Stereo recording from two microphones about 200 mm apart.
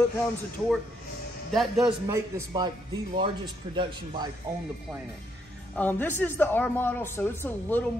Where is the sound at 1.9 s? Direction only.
15° right (ahead or behind).